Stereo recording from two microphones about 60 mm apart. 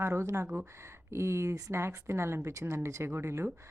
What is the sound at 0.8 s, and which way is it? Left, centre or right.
Speech, right.